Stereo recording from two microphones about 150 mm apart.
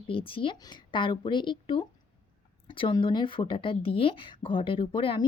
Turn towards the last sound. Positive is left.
turn(degrees=35)  # may be behind; listen again after turning